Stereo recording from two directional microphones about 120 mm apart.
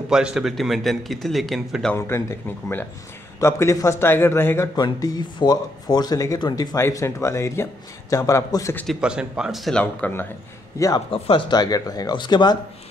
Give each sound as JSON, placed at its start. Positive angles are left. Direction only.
{"t": 0.1, "sound": "speech", "side_deg": -5}
{"t": 2.0, "sound": "a man's voice", "side_deg": 20}
{"t": 4.7, "sound": "a man's voice", "side_deg": 35}
{"t": 9.0, "sound": "speech", "side_deg": -5}
{"t": 9.7, "sound": "speech", "side_deg": 10}
{"t": 10.8, "sound": "a man's voice", "side_deg": 25}
{"t": 11.1, "sound": "speech", "side_deg": 45}